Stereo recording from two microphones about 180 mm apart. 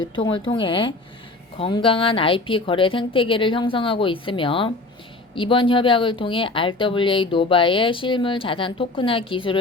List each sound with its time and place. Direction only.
0.0 s speech: 25° left (ahead or behind)